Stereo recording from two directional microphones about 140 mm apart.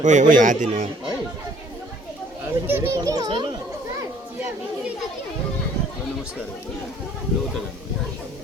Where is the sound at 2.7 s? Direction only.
20° right (ahead or behind).